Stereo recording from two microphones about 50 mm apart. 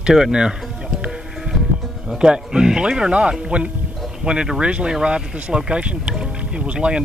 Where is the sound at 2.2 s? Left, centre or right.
Centre.